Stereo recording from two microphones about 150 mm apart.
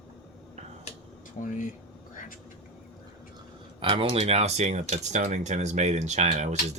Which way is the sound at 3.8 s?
35° right (ahead or behind).